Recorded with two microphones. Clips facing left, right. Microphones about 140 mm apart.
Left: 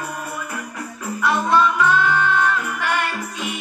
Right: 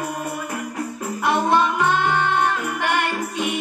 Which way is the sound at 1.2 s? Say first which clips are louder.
Left 1 dB; 55° right (ahead or behind).